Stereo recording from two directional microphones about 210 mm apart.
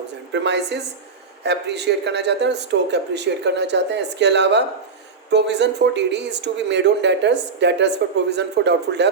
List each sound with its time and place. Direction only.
0.3 s speech: 55° right (ahead or behind)